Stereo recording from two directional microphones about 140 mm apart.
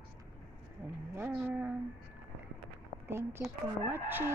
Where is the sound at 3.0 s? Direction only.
15° right (ahead or behind).